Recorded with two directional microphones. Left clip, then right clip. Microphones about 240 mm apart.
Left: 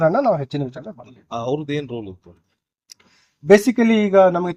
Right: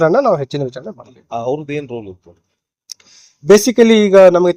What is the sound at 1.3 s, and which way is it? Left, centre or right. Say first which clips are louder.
Speech: right 4 dB; centre.